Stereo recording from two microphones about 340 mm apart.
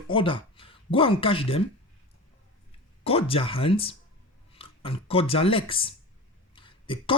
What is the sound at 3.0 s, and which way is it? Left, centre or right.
Speech, centre.